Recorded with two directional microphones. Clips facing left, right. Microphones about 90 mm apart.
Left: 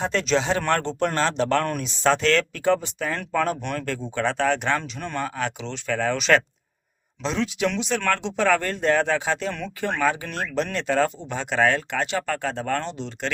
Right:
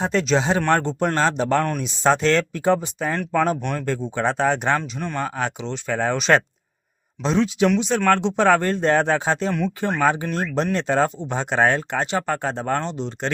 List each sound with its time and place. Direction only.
0.0 s speech: 15° right (ahead or behind)
4.8 s speech: 5° right (ahead or behind)
5.2 s speech: 20° right (ahead or behind)
8.1 s speech: 30° right (ahead or behind)